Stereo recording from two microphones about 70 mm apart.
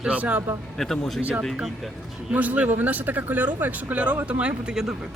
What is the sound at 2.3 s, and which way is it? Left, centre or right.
Speech, right.